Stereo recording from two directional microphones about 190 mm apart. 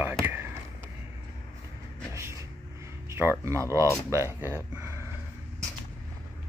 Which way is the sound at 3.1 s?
15° right (ahead or behind).